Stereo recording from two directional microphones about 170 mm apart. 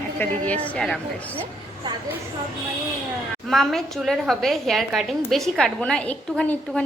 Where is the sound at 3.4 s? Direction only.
Centre (ahead or behind).